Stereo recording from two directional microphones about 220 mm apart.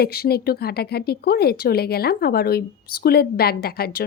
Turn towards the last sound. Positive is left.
turn(degrees=45)  # may be behind; listen again after turning